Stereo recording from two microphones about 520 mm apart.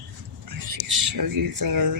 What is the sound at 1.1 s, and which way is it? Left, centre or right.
Speech, right.